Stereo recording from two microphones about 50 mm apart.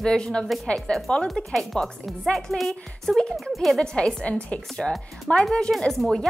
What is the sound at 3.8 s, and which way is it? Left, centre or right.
Speech, centre.